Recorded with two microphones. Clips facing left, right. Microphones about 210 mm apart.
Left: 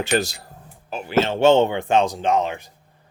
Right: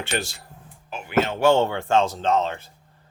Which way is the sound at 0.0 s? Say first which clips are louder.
Left 7 dB; 40° left (ahead or behind).